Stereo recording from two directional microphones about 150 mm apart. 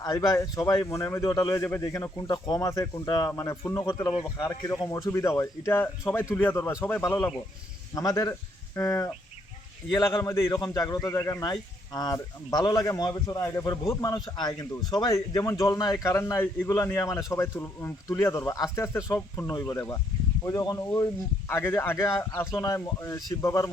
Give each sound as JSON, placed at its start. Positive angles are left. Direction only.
{"t": 0.0, "sound": "a man's voice", "side_deg": 25}